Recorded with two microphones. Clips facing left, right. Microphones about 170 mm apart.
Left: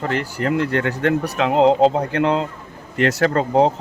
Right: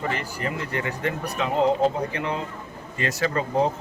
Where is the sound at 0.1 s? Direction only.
70° left (ahead or behind).